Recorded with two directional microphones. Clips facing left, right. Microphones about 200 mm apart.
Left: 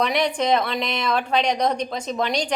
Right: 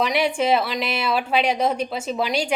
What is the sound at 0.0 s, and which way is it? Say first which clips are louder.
A woman's voice: right 1 dB; 5° right (ahead or behind).